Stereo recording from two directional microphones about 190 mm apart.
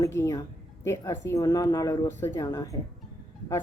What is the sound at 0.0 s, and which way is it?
Speech, 15° left (ahead or behind).